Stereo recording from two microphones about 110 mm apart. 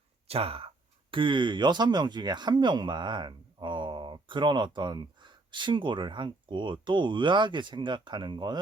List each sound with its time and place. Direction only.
0.3 s speech: 60° right (ahead or behind)
1.1 s speech: 50° right (ahead or behind)